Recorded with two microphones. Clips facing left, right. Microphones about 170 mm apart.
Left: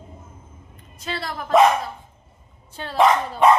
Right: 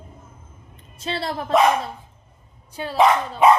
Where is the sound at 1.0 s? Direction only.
30° right (ahead or behind).